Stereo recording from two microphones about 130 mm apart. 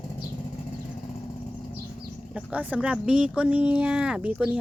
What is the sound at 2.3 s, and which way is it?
Speech, 10° right (ahead or behind).